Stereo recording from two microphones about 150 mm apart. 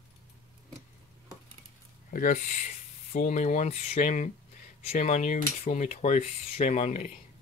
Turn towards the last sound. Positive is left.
turn(degrees=50)  # may be behind; listen again after turning